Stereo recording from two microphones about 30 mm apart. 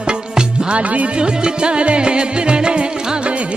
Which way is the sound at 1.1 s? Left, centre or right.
Right.